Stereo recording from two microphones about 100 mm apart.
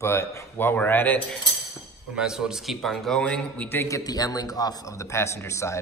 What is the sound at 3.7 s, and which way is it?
Speech, 25° left (ahead or behind).